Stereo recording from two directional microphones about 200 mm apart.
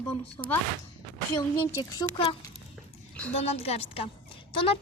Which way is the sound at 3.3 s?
30° left (ahead or behind).